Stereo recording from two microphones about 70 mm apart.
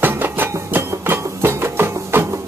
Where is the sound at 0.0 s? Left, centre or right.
Right.